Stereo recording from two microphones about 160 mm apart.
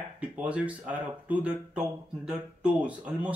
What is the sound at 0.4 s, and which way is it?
Speech, 10° right (ahead or behind).